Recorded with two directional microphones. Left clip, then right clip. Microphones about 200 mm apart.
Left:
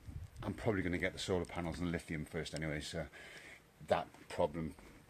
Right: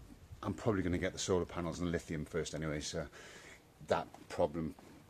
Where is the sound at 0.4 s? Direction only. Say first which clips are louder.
Right 2 dB; centre (ahead or behind).